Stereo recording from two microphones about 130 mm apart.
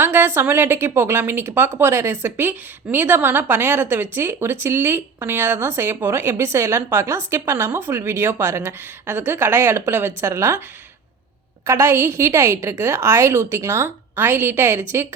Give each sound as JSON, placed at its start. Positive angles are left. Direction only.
{"t": 0.0, "sound": "a woman's voice", "side_deg": -15}
{"t": 11.6, "sound": "speech", "side_deg": -20}